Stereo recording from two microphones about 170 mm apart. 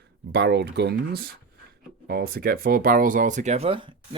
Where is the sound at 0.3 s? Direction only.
75° right (ahead or behind).